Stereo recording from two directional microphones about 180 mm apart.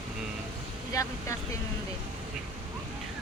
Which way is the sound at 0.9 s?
15° left (ahead or behind).